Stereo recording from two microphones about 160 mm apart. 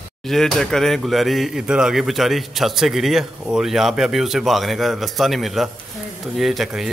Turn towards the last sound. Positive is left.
turn(degrees=0)  # may be behind; listen again after turning